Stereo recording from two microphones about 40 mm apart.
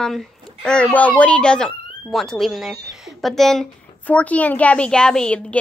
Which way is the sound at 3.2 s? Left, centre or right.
Centre.